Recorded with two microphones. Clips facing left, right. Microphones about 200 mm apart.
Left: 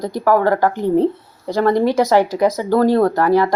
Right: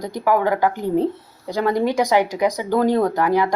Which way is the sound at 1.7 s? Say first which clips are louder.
Left 3 dB; 15° right (ahead or behind).